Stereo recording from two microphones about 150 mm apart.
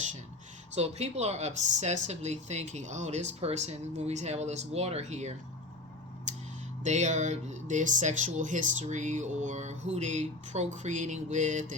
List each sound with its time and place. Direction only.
0.7 s speech: 45° right (ahead or behind)
6.8 s speech: 50° right (ahead or behind)